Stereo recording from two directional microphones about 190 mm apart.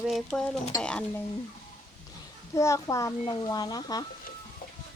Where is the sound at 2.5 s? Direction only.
15° left (ahead or behind).